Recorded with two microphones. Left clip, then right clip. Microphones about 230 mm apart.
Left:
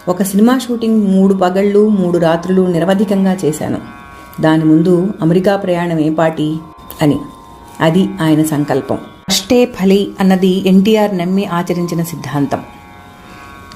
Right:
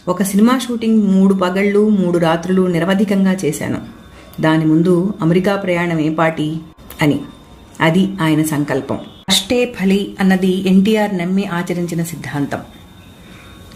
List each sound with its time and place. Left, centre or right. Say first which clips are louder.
0.3 s speech: left 2 dB; centre
7.8 s a woman's voice: left 2 dB; centre